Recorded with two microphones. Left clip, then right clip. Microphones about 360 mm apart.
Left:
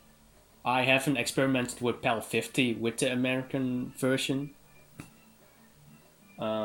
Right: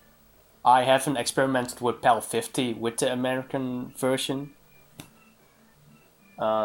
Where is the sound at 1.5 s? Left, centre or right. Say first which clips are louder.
Right 4 dB; right.